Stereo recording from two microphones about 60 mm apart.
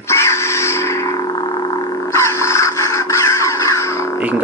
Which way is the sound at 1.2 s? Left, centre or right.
Left.